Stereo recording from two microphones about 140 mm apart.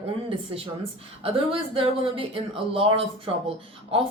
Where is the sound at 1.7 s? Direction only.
40° right (ahead or behind).